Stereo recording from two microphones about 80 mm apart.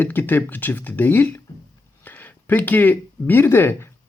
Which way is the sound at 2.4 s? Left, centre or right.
Left.